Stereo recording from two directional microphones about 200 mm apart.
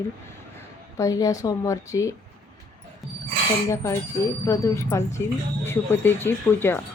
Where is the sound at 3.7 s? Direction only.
15° left (ahead or behind).